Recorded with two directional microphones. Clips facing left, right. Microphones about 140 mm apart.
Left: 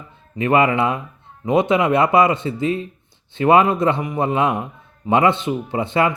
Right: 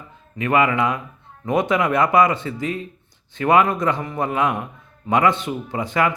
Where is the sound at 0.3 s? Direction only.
30° left (ahead or behind).